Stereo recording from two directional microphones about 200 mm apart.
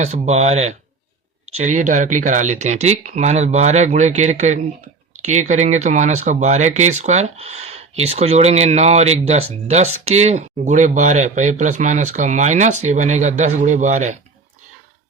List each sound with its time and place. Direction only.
0.0 s speech: 35° right (ahead or behind)
5.1 s a sound: 35° right (ahead or behind)
5.5 s speech: 35° right (ahead or behind)